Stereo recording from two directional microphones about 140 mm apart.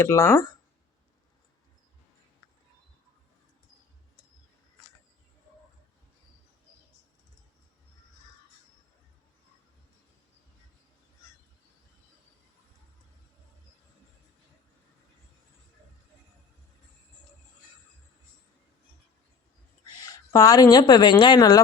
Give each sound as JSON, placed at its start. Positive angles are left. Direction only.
{"t": 0.0, "sound": "speech", "side_deg": 20}
{"t": 20.1, "sound": "speech", "side_deg": 25}